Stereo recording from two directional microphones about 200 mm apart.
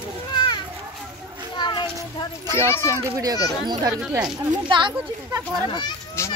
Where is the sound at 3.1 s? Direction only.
20° right (ahead or behind).